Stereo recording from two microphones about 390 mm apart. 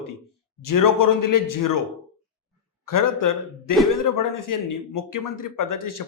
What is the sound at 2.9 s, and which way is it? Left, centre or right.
Speech, left.